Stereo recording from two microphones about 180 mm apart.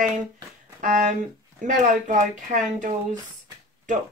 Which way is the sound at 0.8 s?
45° right (ahead or behind).